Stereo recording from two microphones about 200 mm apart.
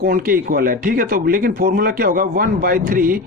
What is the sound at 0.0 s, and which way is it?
Speech, 45° right (ahead or behind).